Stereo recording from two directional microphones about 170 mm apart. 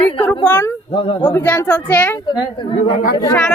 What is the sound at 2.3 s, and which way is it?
Speech, 30° left (ahead or behind).